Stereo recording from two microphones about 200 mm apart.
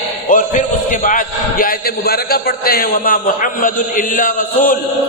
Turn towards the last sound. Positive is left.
turn(degrees=40)  # may be behind; listen again after turning